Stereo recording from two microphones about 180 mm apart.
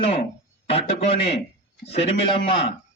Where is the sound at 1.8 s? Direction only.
35° left (ahead or behind).